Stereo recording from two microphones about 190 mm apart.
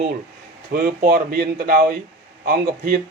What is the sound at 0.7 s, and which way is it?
Speech, 50° right (ahead or behind).